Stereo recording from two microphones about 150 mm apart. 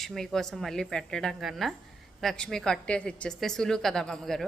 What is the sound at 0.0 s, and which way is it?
A woman's voice, centre (ahead or behind).